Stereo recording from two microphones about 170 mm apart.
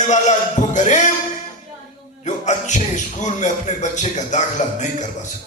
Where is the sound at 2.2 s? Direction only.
45° left (ahead or behind).